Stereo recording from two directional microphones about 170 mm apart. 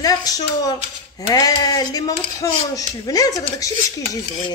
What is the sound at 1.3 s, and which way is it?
Speech, 20° left (ahead or behind).